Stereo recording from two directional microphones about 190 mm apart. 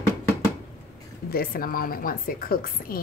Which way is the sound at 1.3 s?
50° left (ahead or behind).